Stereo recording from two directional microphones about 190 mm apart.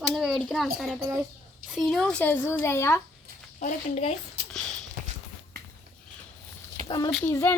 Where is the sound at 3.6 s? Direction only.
35° left (ahead or behind).